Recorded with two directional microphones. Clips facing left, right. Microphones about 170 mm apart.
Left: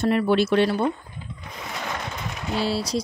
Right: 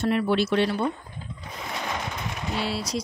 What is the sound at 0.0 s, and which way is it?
Speech, 45° left (ahead or behind).